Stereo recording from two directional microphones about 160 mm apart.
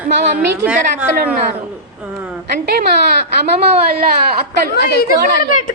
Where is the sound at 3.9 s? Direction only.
70° right (ahead or behind).